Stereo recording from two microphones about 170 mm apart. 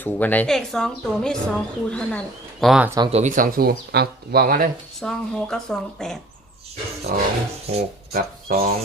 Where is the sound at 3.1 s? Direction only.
45° right (ahead or behind).